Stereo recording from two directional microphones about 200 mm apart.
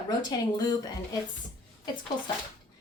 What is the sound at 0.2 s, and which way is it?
A woman's voice, 20° left (ahead or behind).